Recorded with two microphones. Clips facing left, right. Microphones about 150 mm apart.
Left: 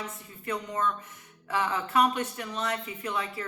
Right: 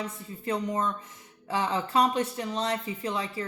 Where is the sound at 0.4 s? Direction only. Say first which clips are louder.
Right 2 dB; 30° right (ahead or behind).